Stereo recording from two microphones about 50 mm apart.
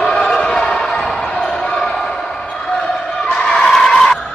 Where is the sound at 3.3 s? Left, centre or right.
Centre.